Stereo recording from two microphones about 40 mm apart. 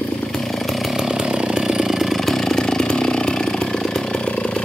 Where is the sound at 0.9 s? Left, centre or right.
Centre.